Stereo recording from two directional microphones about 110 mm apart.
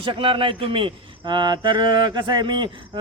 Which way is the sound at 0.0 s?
50° right (ahead or behind).